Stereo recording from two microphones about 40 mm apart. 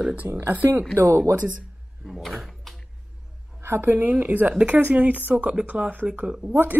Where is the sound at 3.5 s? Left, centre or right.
Right.